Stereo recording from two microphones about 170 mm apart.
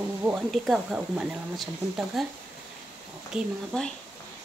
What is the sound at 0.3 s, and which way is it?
Speech, centre (ahead or behind).